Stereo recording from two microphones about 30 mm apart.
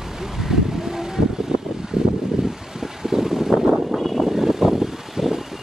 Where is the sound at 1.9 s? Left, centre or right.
Right.